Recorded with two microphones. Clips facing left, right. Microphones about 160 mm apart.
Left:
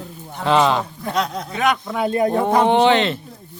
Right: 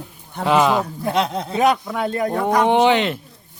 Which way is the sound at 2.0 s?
25° left (ahead or behind).